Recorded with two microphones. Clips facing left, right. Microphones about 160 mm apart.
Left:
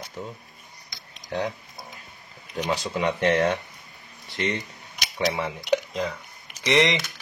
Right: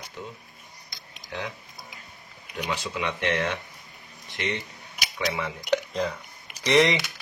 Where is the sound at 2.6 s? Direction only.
40° left (ahead or behind).